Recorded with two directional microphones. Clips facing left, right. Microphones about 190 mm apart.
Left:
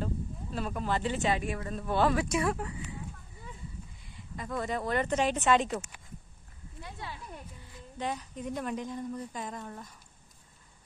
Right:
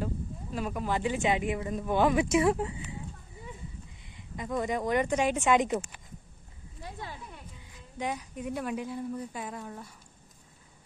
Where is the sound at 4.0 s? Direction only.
20° right (ahead or behind).